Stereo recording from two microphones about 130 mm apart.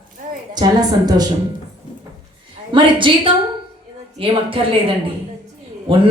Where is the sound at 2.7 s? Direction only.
40° right (ahead or behind).